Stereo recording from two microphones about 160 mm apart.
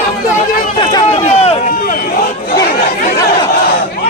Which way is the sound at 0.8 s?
25° left (ahead or behind).